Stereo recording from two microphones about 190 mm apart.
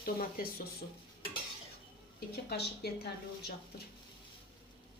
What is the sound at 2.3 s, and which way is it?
Speech, 55° left (ahead or behind).